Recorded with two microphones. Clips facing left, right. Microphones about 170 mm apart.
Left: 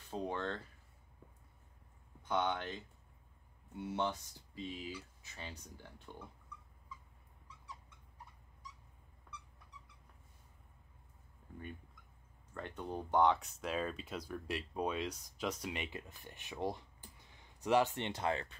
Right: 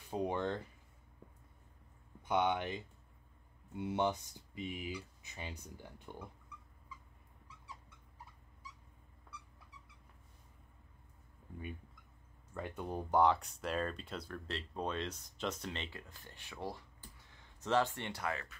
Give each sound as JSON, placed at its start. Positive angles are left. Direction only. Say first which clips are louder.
{"t": 0.1, "sound": "speech", "louder": "right 3 dB", "side_deg": -15}
{"t": 2.2, "sound": "speech", "louder": "right 3 dB", "side_deg": -15}
{"t": 12.5, "sound": "speech", "louder": "right 1 dB", "side_deg": -5}